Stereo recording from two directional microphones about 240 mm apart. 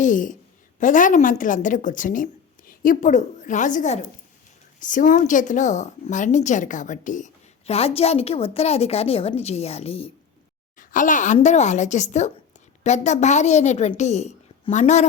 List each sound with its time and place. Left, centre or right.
0.0 s a woman's voice: left